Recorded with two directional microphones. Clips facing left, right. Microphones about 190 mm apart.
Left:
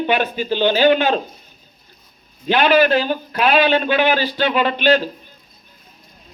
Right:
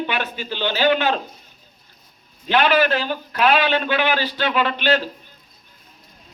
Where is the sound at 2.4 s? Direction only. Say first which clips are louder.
Left 3 dB; 15° left (ahead or behind).